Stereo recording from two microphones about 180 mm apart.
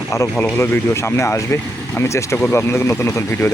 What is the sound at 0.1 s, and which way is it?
Speech, 15° left (ahead or behind).